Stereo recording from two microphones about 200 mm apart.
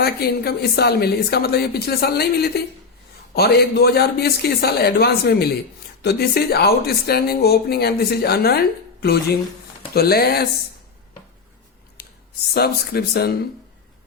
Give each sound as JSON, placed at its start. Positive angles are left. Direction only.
{"t": 0.0, "sound": "speech", "side_deg": 55}
{"t": 12.0, "sound": "a sound", "side_deg": 50}
{"t": 12.5, "sound": "speech", "side_deg": 50}